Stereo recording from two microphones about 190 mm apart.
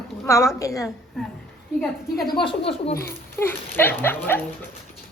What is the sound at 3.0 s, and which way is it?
Speech, 10° left (ahead or behind).